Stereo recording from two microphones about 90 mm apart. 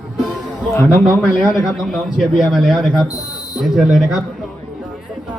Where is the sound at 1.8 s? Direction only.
5° left (ahead or behind).